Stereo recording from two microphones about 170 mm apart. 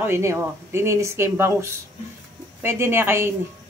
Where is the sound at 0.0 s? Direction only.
15° right (ahead or behind).